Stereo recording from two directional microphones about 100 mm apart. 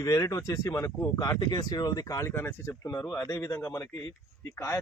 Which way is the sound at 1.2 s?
35° left (ahead or behind).